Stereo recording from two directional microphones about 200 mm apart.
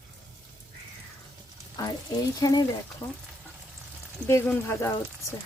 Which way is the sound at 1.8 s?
20° left (ahead or behind).